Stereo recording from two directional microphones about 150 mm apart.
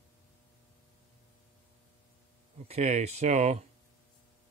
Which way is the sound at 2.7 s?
45° right (ahead or behind).